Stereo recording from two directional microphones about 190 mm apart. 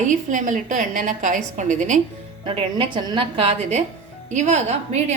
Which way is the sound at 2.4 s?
25° right (ahead or behind).